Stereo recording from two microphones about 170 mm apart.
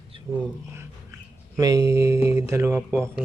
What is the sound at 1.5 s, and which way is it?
Speech, 20° right (ahead or behind).